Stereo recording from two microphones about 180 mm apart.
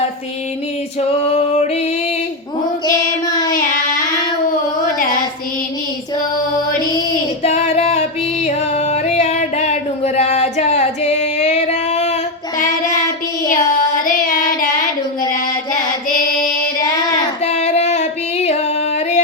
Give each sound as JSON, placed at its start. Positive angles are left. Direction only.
{"t": 2.8, "sound": "music", "side_deg": 20}
{"t": 7.4, "sound": "music", "side_deg": 40}
{"t": 14.3, "sound": "child singing", "side_deg": 50}
{"t": 17.4, "sound": "female singing", "side_deg": 35}